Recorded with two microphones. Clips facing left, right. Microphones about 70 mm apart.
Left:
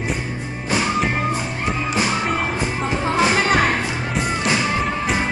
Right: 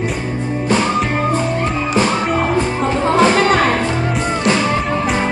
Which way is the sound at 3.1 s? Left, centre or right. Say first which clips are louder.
Right 6 dB; right.